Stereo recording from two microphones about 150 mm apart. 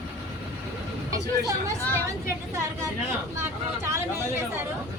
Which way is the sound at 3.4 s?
20° right (ahead or behind).